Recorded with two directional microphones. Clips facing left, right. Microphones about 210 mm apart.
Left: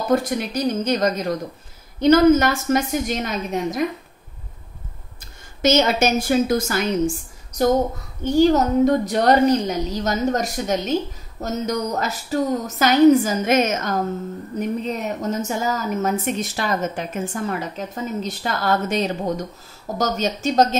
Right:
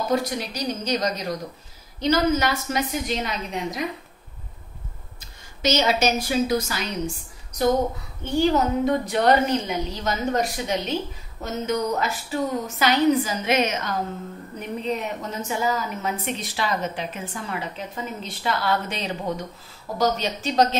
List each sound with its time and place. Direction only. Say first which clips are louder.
0.1 s a woman's voice: left 7 dB; 50° left (ahead or behind)
5.6 s a woman's voice: left 4 dB; 50° left (ahead or behind)
8.2 s a woman's voice: left 5 dB; 40° left (ahead or behind)